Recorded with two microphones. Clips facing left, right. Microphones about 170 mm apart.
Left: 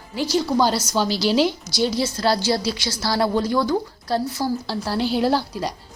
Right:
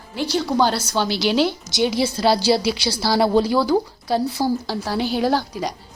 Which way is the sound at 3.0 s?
30° right (ahead or behind).